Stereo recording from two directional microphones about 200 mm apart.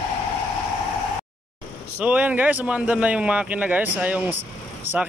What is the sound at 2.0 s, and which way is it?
Speech, 5° right (ahead or behind).